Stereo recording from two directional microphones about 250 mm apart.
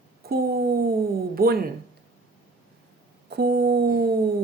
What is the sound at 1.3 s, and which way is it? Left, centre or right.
Speech, right.